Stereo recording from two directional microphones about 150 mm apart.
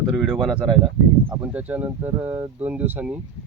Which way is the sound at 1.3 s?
10° right (ahead or behind).